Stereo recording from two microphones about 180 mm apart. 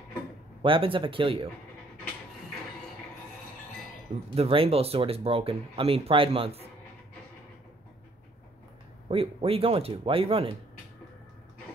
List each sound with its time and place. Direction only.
0.6 s speech: 30° right (ahead or behind)
4.4 s speech: 30° right (ahead or behind)
9.1 s speech: 30° right (ahead or behind)